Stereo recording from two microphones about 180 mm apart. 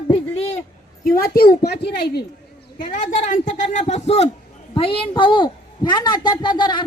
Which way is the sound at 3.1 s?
45° left (ahead or behind).